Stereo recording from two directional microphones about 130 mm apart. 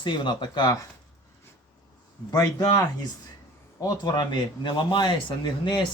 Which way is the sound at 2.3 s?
30° left (ahead or behind).